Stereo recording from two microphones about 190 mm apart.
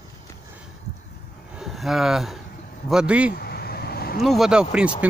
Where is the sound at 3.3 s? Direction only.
55° left (ahead or behind).